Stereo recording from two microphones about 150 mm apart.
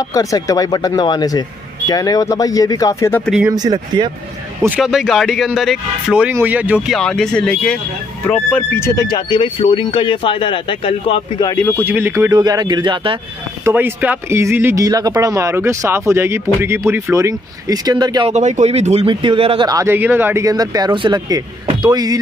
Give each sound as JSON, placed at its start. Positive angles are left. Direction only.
{"t": 0.1, "sound": "speech", "side_deg": 20}
{"t": 3.5, "sound": "speech", "side_deg": -25}
{"t": 4.6, "sound": "speech", "side_deg": -5}
{"t": 7.0, "sound": "speech", "side_deg": 5}
{"t": 11.5, "sound": "speech", "side_deg": 15}
{"t": 11.8, "sound": "speech", "side_deg": -15}
{"t": 12.4, "sound": "speech", "side_deg": -25}
{"t": 13.7, "sound": "speech", "side_deg": -15}
{"t": 18.3, "sound": "speech", "side_deg": -50}
{"t": 19.0, "sound": "speech", "side_deg": -35}
{"t": 19.7, "sound": "speech", "side_deg": -15}